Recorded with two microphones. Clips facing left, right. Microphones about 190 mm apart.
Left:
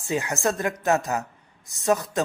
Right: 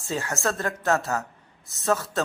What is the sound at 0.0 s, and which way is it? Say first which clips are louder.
Speech: left 3 dB; 15° left (ahead or behind).